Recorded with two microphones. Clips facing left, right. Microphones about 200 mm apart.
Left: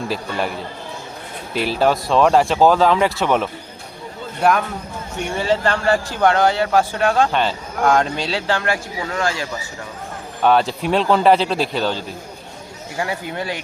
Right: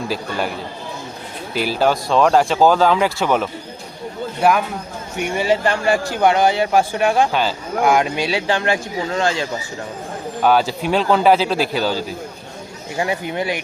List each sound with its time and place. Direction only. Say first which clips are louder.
0.1 s speech: even; centre (ahead or behind)
1.5 s speech: even; centre (ahead or behind)
5.2 s speech: right 2 dB; 15° right (ahead or behind)
7.3 s speech: even; centre (ahead or behind); by 9.5 s 25° right (ahead or behind)
10.4 s speech: even; 5° right (ahead or behind)
13.0 s speech: right 3 dB; 20° right (ahead or behind)